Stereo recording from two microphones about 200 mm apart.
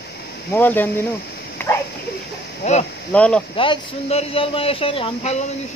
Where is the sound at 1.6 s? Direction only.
10° left (ahead or behind).